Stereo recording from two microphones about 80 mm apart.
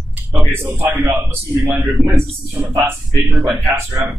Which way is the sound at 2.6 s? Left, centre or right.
Right.